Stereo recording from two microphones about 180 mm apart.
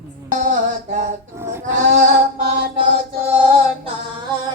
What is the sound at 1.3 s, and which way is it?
Sheep, 15° right (ahead or behind).